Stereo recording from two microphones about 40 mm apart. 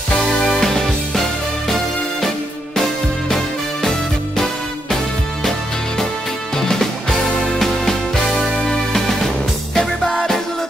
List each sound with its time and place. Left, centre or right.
0.3 s music: centre
2.2 s music: centre
6.5 s music: centre